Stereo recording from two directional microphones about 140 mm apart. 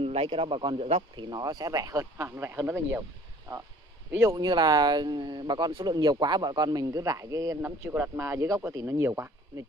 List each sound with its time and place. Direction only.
0.0 s speech: 40° right (ahead or behind)
1.3 s speech: 25° right (ahead or behind)
4.2 s speech: 25° right (ahead or behind)